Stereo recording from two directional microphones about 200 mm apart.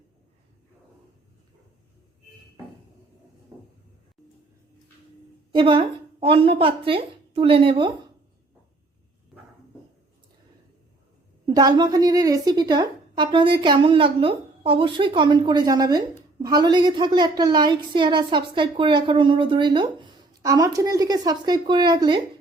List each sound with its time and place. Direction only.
5.5 s a woman's voice: 25° right (ahead or behind)
11.4 s a woman's voice: 20° right (ahead or behind)